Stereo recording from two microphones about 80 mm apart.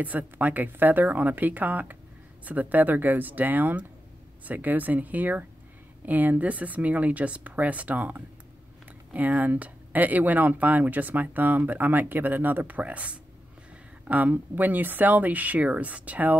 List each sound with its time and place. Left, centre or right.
0.0 s speech: centre